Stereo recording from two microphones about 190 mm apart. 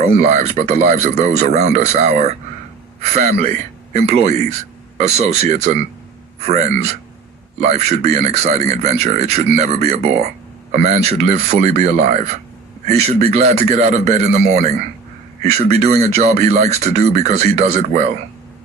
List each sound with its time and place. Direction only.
0.0 s a man's voice: 40° right (ahead or behind)